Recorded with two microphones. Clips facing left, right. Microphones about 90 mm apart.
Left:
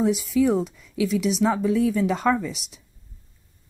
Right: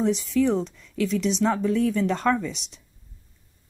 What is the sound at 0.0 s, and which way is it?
Speech, 5° left (ahead or behind).